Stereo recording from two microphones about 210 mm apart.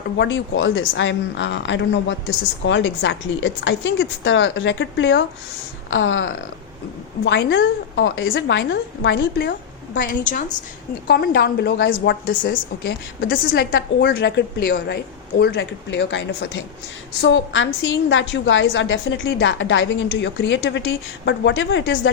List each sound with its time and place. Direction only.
0.2 s speech: 60° left (ahead or behind)
10.1 s a woman's voice: 40° left (ahead or behind); by 22.1 s 60° left (ahead or behind)